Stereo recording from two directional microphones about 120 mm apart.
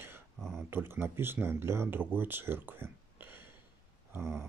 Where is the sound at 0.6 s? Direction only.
20° right (ahead or behind).